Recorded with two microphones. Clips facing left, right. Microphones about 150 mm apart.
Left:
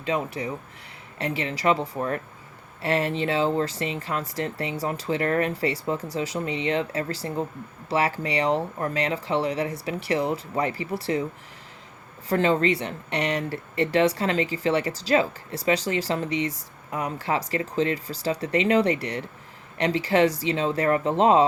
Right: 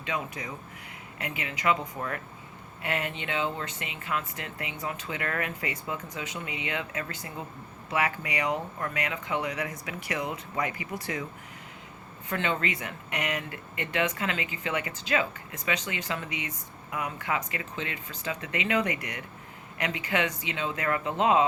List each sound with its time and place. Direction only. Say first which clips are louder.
0.0 s speech: left 7 dB; 30° left (ahead or behind)
12.3 s speech: left 9 dB; 35° left (ahead or behind)